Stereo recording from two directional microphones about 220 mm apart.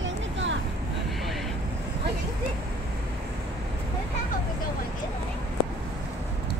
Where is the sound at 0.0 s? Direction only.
55° right (ahead or behind).